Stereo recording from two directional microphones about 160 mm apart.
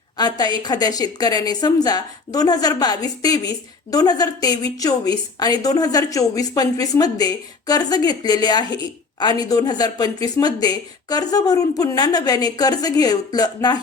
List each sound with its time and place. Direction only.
0.2 s a woman's voice: 25° left (ahead or behind)